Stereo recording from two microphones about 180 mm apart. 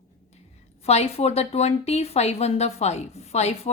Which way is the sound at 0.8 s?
35° left (ahead or behind).